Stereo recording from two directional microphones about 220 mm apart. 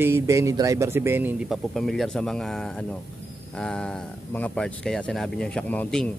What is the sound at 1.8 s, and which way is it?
A man's voice, centre (ahead or behind).